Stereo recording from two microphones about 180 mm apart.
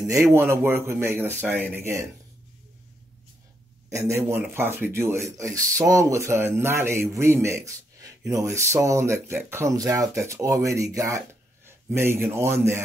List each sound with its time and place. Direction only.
0.0 s speech: 15° right (ahead or behind)
3.9 s speech: 15° right (ahead or behind)